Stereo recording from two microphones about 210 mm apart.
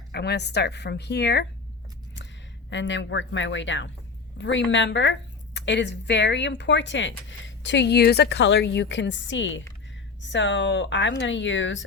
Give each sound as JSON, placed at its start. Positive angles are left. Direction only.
{"t": 0.1, "sound": "a woman's voice", "side_deg": 50}
{"t": 2.6, "sound": "speech", "side_deg": 60}